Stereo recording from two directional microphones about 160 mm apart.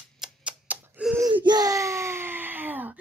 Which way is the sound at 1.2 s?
30° right (ahead or behind).